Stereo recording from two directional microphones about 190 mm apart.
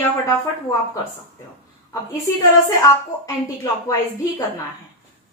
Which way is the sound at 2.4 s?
15° left (ahead or behind).